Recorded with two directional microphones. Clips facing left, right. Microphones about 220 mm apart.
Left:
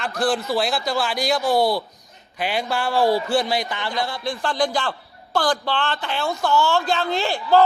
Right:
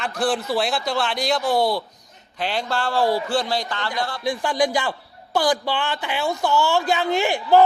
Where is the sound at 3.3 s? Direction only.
15° left (ahead or behind).